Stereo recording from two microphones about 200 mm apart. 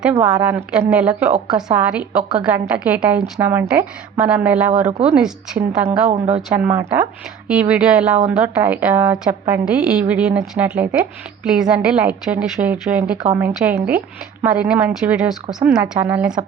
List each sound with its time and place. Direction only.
0.2 s a woman's voice: 5° right (ahead or behind)
4.7 s speech: 35° right (ahead or behind)
5.1 s a woman's voice: 5° right (ahead or behind)
6.1 s speech: 30° right (ahead or behind)
6.5 s a woman's voice: 10° right (ahead or behind)